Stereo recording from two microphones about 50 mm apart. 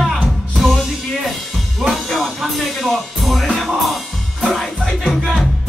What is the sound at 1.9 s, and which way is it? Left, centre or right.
Music, centre.